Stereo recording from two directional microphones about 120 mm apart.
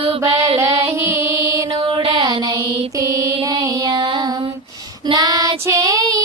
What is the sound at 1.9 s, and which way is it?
Mantra, 50° right (ahead or behind).